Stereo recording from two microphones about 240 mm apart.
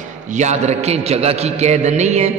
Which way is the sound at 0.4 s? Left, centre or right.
Right.